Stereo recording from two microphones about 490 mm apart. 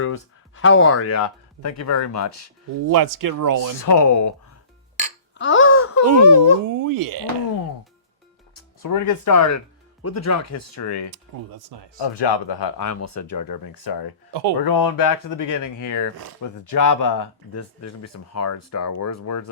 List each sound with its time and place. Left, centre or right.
0.0 s speech: left
2.8 s speech: right
3.8 s speech: left
5.4 s a sound: left
6.1 s speech: right
8.5 s speech: left
11.1 s speech: right
11.9 s speech: left